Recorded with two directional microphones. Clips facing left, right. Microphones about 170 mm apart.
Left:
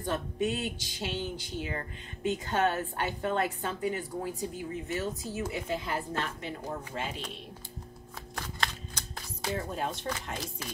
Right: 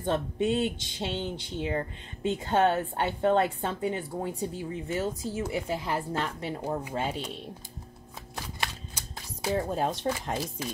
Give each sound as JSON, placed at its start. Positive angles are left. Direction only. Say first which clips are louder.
{"t": 0.0, "sound": "speech", "louder": "right 3 dB", "side_deg": -30}
{"t": 8.4, "sound": "a sound", "louder": "even", "side_deg": -10}
{"t": 9.6, "sound": "speech", "louder": "right 7 dB", "side_deg": -35}